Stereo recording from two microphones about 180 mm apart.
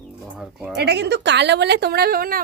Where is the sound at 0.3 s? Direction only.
5° right (ahead or behind).